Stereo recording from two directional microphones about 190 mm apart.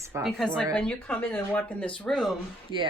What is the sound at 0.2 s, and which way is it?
Speech, centre (ahead or behind).